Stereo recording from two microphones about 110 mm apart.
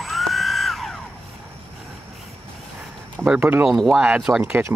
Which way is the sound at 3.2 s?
15° right (ahead or behind).